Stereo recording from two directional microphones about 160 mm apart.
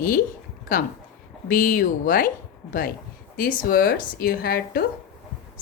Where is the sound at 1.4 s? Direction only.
55° left (ahead or behind).